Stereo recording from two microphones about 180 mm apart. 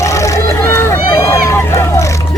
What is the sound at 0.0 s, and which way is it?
Vehicle, 15° left (ahead or behind).